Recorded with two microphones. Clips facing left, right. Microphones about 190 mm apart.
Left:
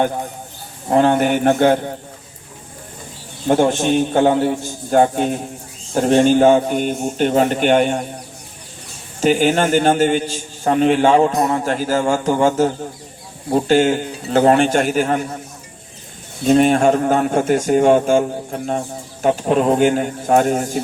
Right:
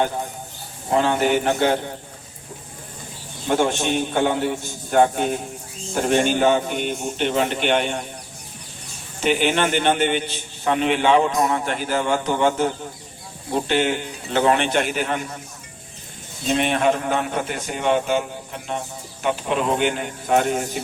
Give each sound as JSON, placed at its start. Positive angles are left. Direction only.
{"t": 0.9, "sound": "a man's voice", "side_deg": 50}
{"t": 3.4, "sound": "a man's voice", "side_deg": 45}
{"t": 9.2, "sound": "a man's voice", "side_deg": 40}
{"t": 16.5, "sound": "a man's voice", "side_deg": 45}